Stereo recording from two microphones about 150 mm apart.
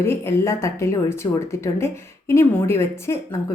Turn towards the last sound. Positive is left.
turn(degrees=20)  # may be behind; listen again after turning